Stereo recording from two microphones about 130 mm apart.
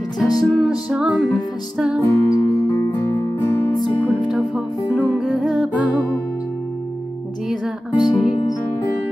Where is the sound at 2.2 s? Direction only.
25° left (ahead or behind).